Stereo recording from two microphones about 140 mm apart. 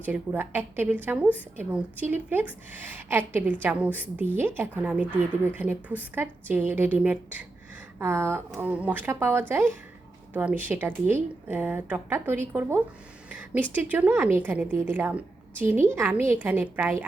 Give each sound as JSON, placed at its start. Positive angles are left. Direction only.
{"t": 0.0, "sound": "a woman's voice", "side_deg": -15}